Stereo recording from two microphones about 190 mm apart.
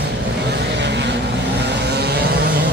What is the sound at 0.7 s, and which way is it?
Vehicle, 65° right (ahead or behind).